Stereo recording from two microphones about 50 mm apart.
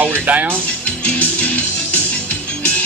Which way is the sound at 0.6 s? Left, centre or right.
Left.